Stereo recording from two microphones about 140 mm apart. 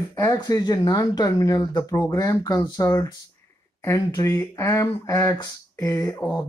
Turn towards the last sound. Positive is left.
turn(degrees=30)  # may be behind; listen again after turning